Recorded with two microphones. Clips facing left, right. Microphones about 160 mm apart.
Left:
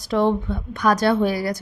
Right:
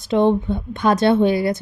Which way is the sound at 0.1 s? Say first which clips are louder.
Right 3 dB; 20° right (ahead or behind).